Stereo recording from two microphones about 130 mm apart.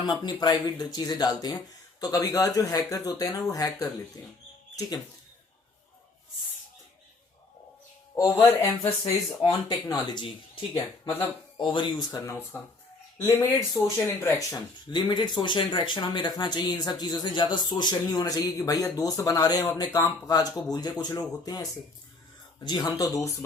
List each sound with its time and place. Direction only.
0.0 s speech: 35° left (ahead or behind)
8.2 s speech: 25° left (ahead or behind)
9.4 s speech: 35° left (ahead or behind)